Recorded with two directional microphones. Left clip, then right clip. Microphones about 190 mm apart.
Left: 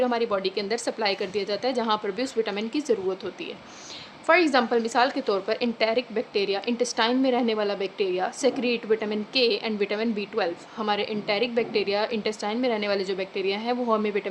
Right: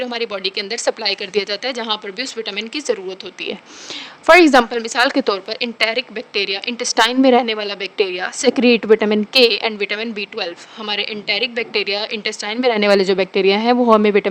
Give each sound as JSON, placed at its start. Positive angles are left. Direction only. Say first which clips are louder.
{"t": 0.0, "sound": "a woman's voice", "louder": "right 2 dB", "side_deg": -50}
{"t": 4.3, "sound": "a woman's voice", "louder": "right 10 dB", "side_deg": -50}